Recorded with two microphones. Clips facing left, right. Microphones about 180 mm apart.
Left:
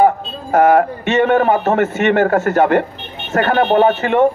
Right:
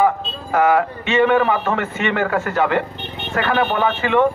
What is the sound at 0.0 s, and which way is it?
Speech, 45° left (ahead or behind).